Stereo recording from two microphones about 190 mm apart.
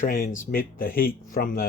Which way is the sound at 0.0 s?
45° left (ahead or behind).